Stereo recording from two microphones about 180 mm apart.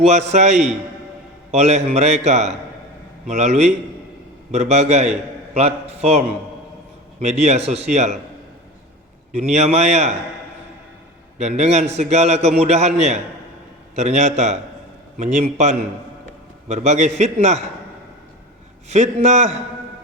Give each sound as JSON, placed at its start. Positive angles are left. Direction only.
{"t": 0.0, "sound": "a man's voice", "side_deg": -40}
{"t": 9.3, "sound": "a man's voice", "side_deg": -40}
{"t": 11.3, "sound": "a man's voice", "side_deg": -40}
{"t": 18.9, "sound": "a man's voice", "side_deg": -40}